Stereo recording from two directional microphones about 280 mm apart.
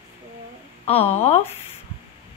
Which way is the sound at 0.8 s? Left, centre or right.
Left.